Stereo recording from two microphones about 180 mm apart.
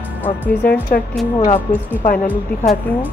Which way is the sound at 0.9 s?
60° left (ahead or behind).